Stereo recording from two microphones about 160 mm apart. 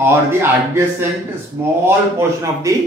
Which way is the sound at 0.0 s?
15° right (ahead or behind).